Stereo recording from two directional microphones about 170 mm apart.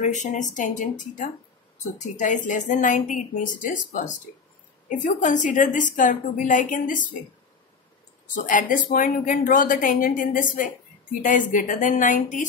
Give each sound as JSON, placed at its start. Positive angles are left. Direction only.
{"t": 0.0, "sound": "a woman's voice", "side_deg": 45}
{"t": 8.5, "sound": "a woman's voice", "side_deg": 50}